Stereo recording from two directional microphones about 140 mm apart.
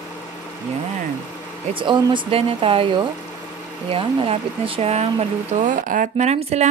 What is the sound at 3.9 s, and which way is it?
Speech, 40° right (ahead or behind).